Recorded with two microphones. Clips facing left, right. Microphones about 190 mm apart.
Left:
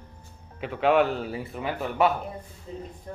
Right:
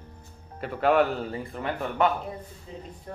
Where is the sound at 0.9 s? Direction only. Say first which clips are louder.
Left 1 dB; 10° left (ahead or behind).